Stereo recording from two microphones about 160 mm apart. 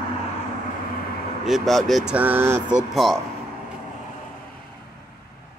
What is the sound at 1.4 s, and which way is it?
Speech, centre (ahead or behind).